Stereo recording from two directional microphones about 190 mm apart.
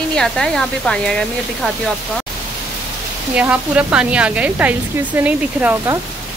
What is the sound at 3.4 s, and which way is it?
Speech, 5° right (ahead or behind).